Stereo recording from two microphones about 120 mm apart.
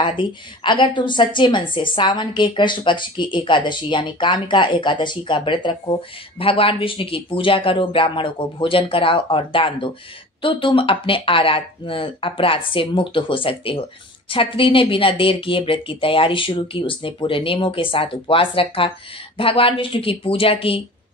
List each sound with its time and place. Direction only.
0.0 s a woman's voice: 45° left (ahead or behind)